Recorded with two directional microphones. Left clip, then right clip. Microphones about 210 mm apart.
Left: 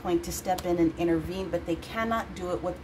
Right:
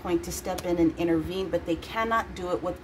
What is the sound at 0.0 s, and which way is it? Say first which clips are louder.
Speech: even; 15° right (ahead or behind).